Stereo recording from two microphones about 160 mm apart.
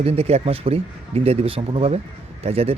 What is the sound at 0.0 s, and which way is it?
Speech, 40° right (ahead or behind).